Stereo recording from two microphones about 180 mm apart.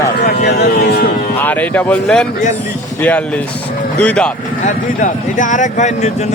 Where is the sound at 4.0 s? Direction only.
5° left (ahead or behind).